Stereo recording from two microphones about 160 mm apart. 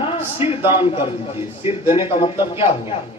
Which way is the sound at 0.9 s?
15° right (ahead or behind).